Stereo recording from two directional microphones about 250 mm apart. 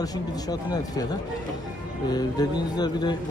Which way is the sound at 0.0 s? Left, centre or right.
Centre.